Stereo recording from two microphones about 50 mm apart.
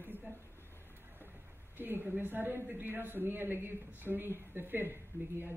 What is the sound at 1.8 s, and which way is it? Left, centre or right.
Speech, right.